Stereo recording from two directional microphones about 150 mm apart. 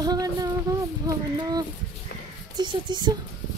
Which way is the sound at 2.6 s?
30° right (ahead or behind).